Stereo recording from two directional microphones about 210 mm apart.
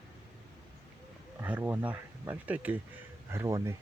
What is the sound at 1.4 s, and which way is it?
Speech, 10° right (ahead or behind).